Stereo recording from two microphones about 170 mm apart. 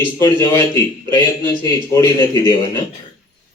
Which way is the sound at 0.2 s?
15° left (ahead or behind).